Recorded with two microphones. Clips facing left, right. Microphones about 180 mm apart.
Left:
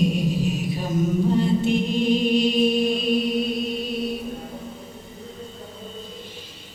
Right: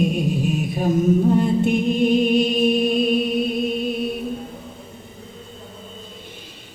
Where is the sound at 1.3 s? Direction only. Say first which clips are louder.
Right 2 dB; 55° right (ahead or behind).